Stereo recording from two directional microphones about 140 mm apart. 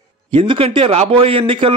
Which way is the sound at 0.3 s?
40° right (ahead or behind).